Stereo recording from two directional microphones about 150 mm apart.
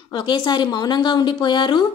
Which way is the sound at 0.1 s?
30° left (ahead or behind).